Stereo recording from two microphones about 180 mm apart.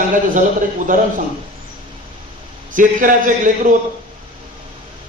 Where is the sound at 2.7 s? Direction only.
45° right (ahead or behind).